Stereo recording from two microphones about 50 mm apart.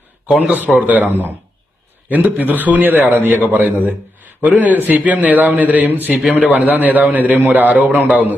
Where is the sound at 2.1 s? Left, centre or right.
Right.